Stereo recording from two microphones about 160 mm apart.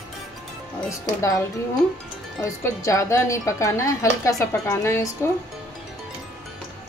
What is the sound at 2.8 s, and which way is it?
Speech, 20° left (ahead or behind).